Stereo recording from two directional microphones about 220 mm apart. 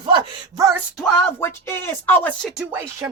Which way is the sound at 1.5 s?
10° left (ahead or behind).